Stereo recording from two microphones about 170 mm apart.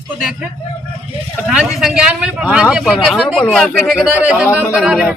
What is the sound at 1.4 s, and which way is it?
Speech, centre (ahead or behind).